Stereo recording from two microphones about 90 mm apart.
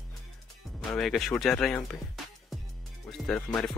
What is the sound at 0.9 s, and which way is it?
Speech, 5° left (ahead or behind).